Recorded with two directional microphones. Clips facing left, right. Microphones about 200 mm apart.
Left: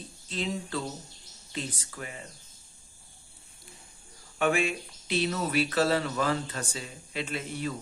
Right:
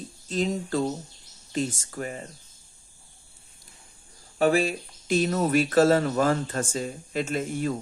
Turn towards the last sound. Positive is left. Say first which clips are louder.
# right 6 dB
turn(degrees=-45)  # may be behind; listen again after turning